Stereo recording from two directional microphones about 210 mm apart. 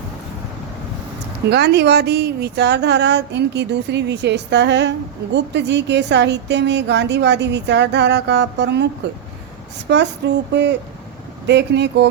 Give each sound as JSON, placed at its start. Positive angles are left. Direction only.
{"t": 1.5, "sound": "speech", "side_deg": -50}
{"t": 9.9, "sound": "speech", "side_deg": -55}